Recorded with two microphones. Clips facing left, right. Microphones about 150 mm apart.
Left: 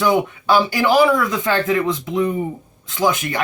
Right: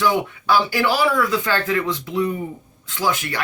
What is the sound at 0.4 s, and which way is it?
Speech, 20° left (ahead or behind).